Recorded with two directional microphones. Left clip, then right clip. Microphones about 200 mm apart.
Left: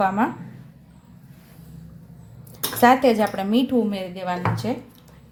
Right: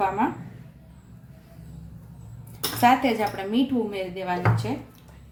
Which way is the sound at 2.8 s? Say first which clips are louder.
Left 4 dB; 45° left (ahead or behind).